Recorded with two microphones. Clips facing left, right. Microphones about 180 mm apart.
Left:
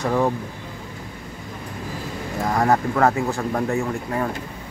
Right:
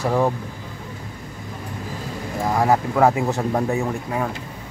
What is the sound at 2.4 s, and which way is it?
Speech, 5° right (ahead or behind).